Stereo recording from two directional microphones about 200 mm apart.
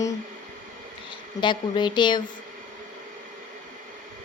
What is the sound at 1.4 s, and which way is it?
Speech, 25° left (ahead or behind).